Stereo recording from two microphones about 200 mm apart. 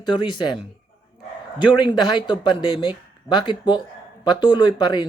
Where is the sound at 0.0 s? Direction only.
20° left (ahead or behind).